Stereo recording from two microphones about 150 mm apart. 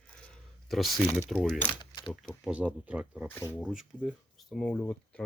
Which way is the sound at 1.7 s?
30° left (ahead or behind).